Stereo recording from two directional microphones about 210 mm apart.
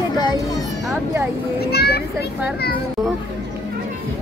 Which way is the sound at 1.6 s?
50° left (ahead or behind).